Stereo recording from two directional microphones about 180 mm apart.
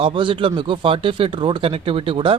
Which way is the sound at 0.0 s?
30° right (ahead or behind).